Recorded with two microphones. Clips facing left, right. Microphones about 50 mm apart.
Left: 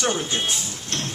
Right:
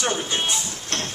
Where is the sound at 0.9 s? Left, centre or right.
Right.